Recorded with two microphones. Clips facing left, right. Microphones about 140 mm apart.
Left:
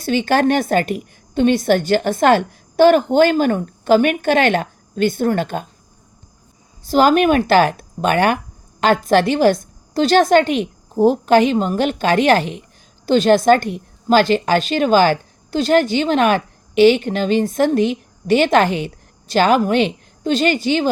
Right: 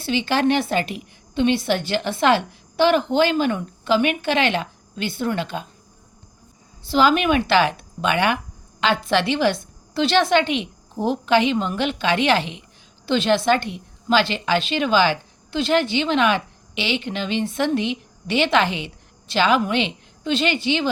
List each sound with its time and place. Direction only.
0.0 s a woman's voice: 45° left (ahead or behind)
6.8 s a woman's voice: 45° left (ahead or behind)